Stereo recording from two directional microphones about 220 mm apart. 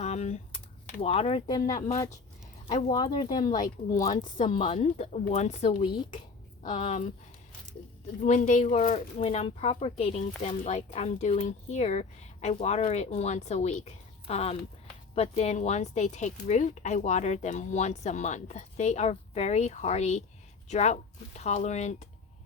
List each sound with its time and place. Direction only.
0.0 s typing: 30° left (ahead or behind)
1.0 s speech: 25° left (ahead or behind)
4.0 s speech: 35° left (ahead or behind)
4.4 s speech: 25° left (ahead or behind)
8.2 s speech: 35° left (ahead or behind)